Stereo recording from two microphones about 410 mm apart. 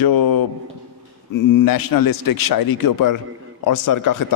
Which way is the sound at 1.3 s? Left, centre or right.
Left.